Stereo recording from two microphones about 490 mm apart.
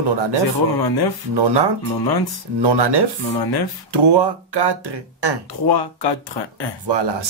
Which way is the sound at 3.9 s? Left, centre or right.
Right.